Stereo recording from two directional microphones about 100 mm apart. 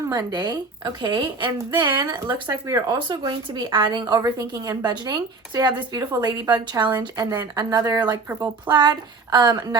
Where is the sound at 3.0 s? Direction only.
50° right (ahead or behind).